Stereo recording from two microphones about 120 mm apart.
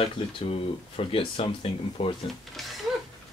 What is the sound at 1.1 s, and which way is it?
Speech, 50° left (ahead or behind).